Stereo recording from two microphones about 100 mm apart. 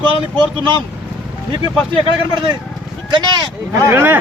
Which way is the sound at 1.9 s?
65° right (ahead or behind).